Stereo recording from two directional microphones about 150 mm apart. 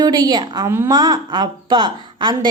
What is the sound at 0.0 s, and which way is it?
A woman's voice, 30° right (ahead or behind).